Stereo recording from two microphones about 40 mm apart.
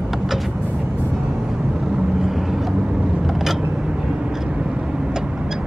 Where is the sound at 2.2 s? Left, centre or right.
Centre.